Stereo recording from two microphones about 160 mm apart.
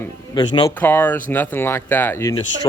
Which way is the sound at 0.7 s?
10° left (ahead or behind).